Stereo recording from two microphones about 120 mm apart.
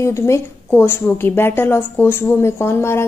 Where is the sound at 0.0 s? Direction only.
25° left (ahead or behind).